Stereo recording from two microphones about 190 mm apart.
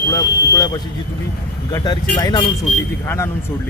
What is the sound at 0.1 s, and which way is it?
Speech, 20° left (ahead or behind).